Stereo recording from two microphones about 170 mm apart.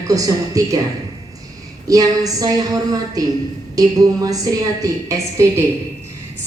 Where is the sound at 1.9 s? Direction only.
20° right (ahead or behind).